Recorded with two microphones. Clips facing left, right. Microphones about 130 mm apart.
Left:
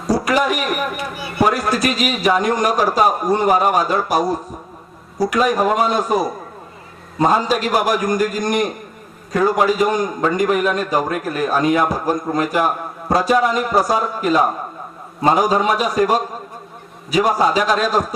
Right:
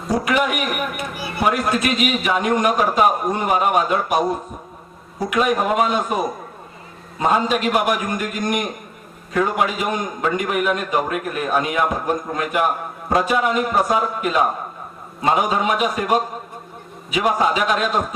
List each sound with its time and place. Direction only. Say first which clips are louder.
0.1 s a man's voice: left 2 dB; 35° left (ahead or behind)